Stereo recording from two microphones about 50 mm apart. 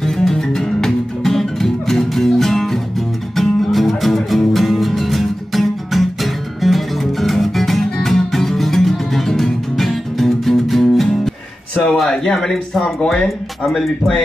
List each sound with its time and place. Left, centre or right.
0.0 s music: centre
11.7 s a sound: centre
12.0 s speech: centre